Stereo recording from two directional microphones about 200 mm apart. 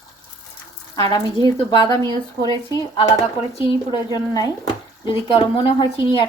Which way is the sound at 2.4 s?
20° right (ahead or behind).